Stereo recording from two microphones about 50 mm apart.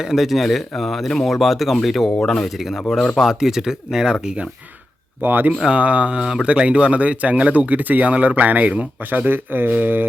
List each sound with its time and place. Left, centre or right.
0.0 s speech: centre
5.2 s speech: right
5.6 s speech: right
6.2 s speech: centre
6.5 s speech: right